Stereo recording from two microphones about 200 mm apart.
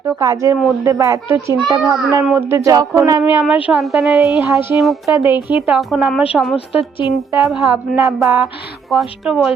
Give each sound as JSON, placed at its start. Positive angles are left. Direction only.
{"t": 0.2, "sound": "a child's voice", "side_deg": -15}